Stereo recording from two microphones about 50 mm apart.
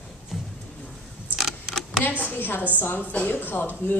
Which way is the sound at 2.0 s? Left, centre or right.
Left.